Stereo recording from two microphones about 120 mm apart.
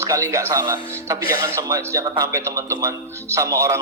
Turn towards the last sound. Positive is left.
turn(degrees=-25)  # may be behind; listen again after turning